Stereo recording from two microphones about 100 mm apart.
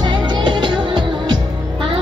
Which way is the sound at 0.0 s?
50° right (ahead or behind).